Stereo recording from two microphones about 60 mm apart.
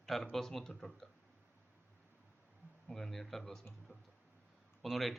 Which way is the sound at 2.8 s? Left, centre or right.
Centre.